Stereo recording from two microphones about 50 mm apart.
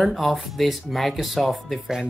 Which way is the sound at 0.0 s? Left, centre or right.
Centre.